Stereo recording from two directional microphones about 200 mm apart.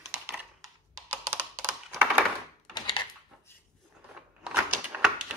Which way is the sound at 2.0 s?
10° right (ahead or behind).